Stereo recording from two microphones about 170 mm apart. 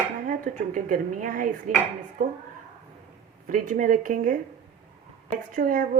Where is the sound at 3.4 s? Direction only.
55° right (ahead or behind).